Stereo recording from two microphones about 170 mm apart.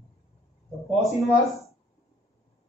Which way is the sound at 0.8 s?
Centre (ahead or behind).